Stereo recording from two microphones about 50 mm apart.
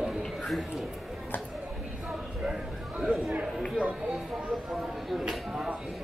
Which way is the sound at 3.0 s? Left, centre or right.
Centre.